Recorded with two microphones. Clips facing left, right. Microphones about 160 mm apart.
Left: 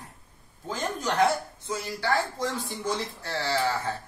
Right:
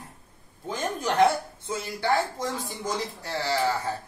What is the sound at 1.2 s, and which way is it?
A woman's voice, 25° right (ahead or behind).